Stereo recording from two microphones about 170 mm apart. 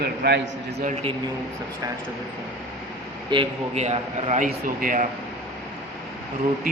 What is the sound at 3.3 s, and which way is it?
Speech, 25° right (ahead or behind).